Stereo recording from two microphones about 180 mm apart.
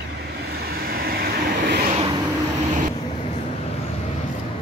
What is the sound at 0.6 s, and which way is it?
Vehicle, 55° right (ahead or behind).